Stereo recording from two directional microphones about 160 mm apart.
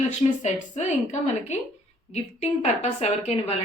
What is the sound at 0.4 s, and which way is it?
Speech, 45° left (ahead or behind).